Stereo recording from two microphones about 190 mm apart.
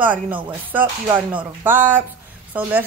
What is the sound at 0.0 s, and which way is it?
Speech, 10° right (ahead or behind).